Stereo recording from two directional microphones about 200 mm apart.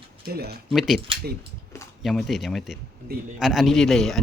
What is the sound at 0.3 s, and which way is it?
Speech, 50° right (ahead or behind).